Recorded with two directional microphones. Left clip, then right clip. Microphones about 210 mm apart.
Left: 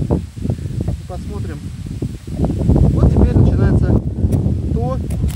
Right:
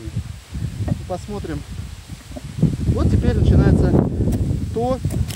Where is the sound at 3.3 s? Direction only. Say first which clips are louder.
Left 1 dB; 10° right (ahead or behind).